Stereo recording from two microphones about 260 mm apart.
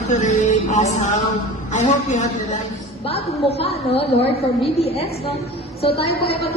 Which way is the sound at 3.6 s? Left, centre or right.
Left.